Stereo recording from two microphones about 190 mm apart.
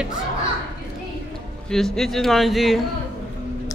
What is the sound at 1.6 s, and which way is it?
Speech, centre (ahead or behind).